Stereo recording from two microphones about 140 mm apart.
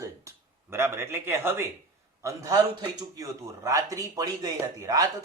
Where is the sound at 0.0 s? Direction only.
20° right (ahead or behind).